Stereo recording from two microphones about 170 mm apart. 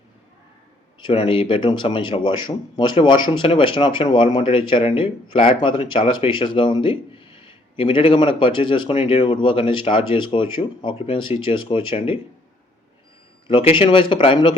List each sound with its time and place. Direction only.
0.9 s speech: 30° left (ahead or behind)
13.5 s speech: 30° left (ahead or behind)